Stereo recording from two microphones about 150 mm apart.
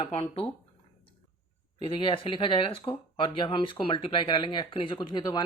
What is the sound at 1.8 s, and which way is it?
Speech, 40° left (ahead or behind).